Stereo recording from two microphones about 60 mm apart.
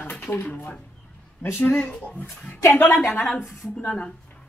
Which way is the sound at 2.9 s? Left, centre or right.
Left.